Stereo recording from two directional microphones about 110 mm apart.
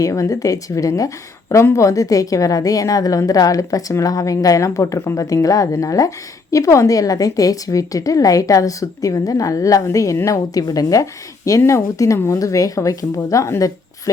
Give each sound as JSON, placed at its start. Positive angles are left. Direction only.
{"t": 0.0, "sound": "a woman's voice", "side_deg": 30}